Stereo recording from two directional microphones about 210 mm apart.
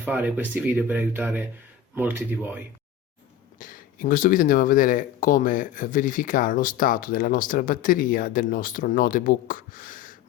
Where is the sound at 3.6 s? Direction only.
40° left (ahead or behind).